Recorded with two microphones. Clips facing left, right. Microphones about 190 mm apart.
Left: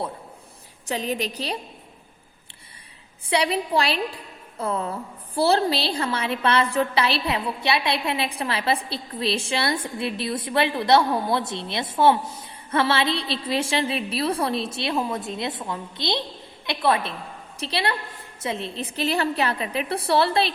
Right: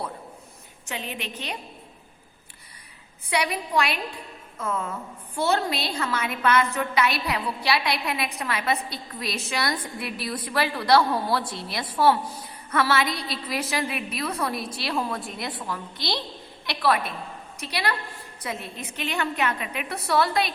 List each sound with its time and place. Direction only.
0.9 s a woman's voice: 40° left (ahead or behind)
3.2 s a woman's voice: 30° left (ahead or behind)